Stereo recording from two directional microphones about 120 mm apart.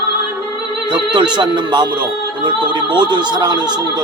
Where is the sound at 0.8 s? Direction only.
40° right (ahead or behind).